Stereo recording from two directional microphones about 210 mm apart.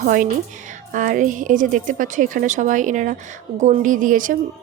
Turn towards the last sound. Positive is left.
turn(degrees=-40)  # may be behind; listen again after turning